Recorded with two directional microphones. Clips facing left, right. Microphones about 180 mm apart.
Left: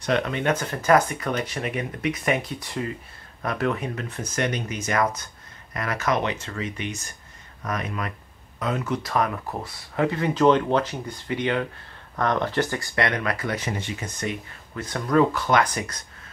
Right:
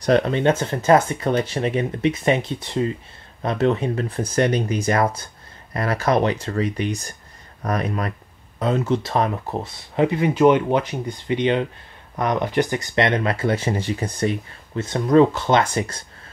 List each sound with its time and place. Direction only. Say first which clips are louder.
0.0 s speech: right 6 dB; 35° right (ahead or behind)